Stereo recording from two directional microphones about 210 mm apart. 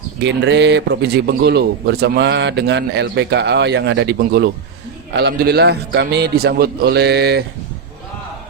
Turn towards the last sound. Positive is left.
turn(degrees=-50)  # may be behind; listen again after turning